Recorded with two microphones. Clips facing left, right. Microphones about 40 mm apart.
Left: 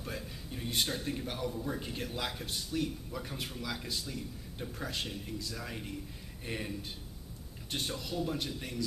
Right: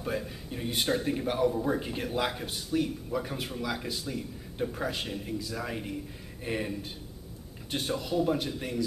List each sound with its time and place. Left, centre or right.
0.0 s a man's voice: centre
1.5 s a man's voice: right
1.8 s a man's voice: centre